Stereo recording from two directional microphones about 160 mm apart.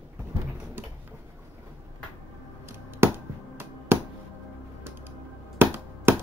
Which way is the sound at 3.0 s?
15° right (ahead or behind).